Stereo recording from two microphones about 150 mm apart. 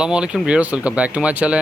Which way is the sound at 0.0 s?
5° right (ahead or behind).